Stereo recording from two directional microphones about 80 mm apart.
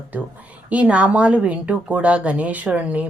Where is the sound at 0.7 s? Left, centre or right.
Centre.